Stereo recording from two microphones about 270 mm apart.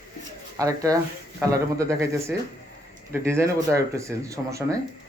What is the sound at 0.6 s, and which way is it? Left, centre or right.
Speech, centre.